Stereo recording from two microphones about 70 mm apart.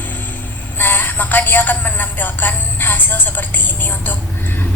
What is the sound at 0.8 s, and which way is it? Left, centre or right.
A woman's voice, left.